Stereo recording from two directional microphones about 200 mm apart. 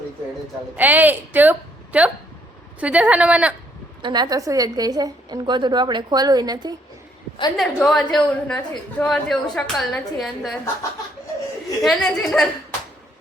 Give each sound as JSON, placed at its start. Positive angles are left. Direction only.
{"t": 0.8, "sound": "a woman's voice", "side_deg": -10}
{"t": 4.0, "sound": "a woman's voice", "side_deg": -20}
{"t": 7.5, "sound": "a woman's voice", "side_deg": 0}
{"t": 11.8, "sound": "a woman's voice", "side_deg": 5}